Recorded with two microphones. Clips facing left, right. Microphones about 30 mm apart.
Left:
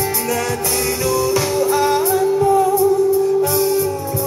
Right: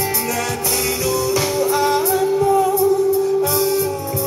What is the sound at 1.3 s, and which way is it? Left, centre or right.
Music, centre.